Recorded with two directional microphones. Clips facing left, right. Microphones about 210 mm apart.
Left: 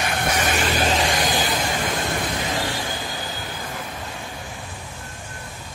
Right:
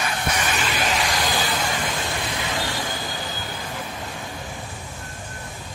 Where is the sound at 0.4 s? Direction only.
45° left (ahead or behind).